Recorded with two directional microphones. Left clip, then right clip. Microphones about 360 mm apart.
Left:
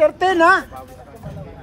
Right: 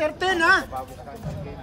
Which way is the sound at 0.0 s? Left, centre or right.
Centre.